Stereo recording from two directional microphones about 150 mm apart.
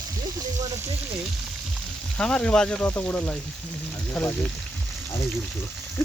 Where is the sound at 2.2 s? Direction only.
5° left (ahead or behind).